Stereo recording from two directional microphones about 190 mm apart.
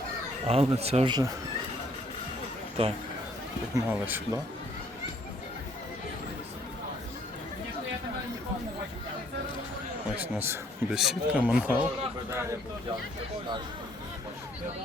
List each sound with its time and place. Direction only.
0.4 s speech: 30° right (ahead or behind)
2.8 s speech: 30° right (ahead or behind)
3.8 s speech: 10° right (ahead or behind)
10.2 s speech: 10° right (ahead or behind)